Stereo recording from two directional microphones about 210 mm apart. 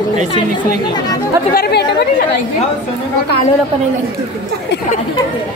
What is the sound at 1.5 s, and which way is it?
Speech, 50° left (ahead or behind).